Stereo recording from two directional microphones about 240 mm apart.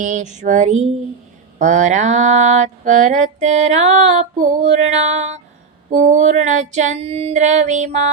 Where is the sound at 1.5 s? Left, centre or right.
Right.